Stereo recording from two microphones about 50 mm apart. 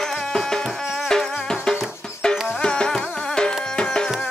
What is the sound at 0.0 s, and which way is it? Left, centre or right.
Music, centre.